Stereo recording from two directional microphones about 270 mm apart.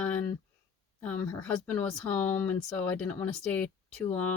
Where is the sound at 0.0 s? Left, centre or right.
Centre.